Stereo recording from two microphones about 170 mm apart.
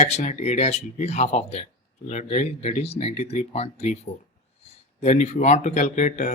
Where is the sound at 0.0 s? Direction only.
45° left (ahead or behind).